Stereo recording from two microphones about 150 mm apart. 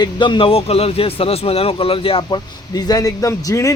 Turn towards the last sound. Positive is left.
turn(degrees=20)  # may be behind; listen again after turning